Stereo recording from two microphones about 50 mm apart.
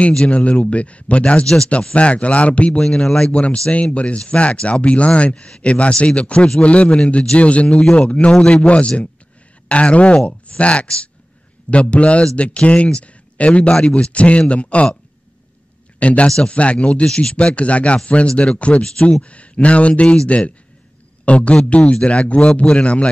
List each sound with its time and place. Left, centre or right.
0.1 s speech: left
2.8 s speech: centre
16.0 s speech: left